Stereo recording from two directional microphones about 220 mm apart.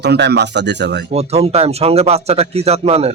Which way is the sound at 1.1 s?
30° right (ahead or behind).